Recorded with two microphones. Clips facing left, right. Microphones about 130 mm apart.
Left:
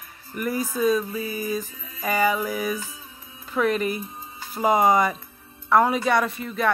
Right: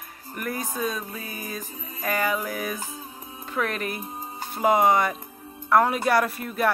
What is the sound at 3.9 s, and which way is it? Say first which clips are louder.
Music: right 1 dB; 50° right (ahead or behind).